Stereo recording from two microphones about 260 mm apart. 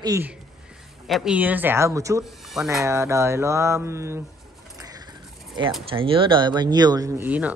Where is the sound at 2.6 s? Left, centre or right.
Centre.